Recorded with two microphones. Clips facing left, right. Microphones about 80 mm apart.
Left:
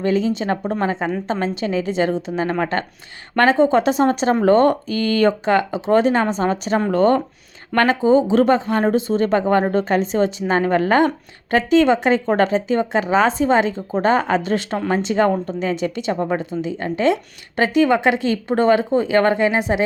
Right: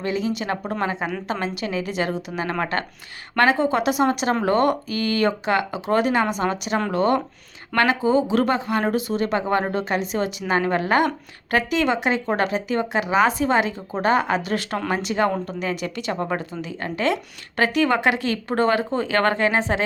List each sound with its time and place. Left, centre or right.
0.0 s speech: left; by 19.8 s centre